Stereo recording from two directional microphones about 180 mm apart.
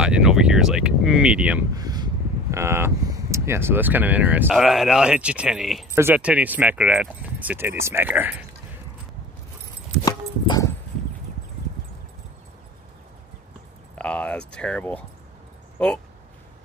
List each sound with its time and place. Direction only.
0.0 s speech: 5° right (ahead or behind)
1.8 s a sound: 20° right (ahead or behind)
2.5 s speech: 15° right (ahead or behind)
10.0 s dog: 20° left (ahead or behind)
13.9 s speech: 5° left (ahead or behind)